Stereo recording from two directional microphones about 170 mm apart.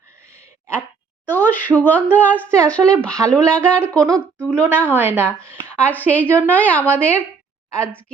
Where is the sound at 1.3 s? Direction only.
10° left (ahead or behind).